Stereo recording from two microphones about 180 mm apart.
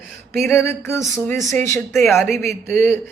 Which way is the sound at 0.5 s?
15° left (ahead or behind).